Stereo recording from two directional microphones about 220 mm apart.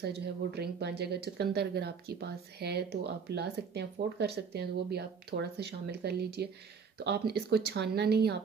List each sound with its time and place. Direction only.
0.0 s speech: 45° right (ahead or behind)